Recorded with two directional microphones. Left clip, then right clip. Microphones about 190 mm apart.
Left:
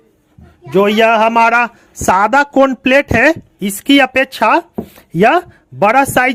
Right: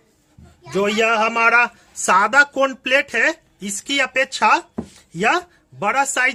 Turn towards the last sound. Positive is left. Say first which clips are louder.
# left 8 dB
turn(degrees=40)  # may be behind; listen again after turning